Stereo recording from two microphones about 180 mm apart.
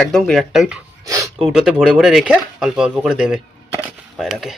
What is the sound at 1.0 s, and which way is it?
Speech, 15° right (ahead or behind).